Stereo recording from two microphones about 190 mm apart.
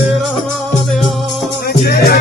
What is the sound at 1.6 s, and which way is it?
Music, 55° left (ahead or behind).